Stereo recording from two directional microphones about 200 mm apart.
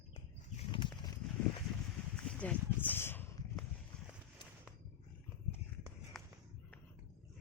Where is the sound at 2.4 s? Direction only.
10° left (ahead or behind).